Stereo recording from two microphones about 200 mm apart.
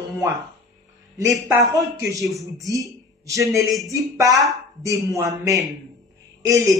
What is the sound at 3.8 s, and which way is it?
Speech, 15° right (ahead or behind).